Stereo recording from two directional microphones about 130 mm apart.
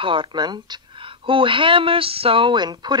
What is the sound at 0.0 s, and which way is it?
Speech, 40° right (ahead or behind).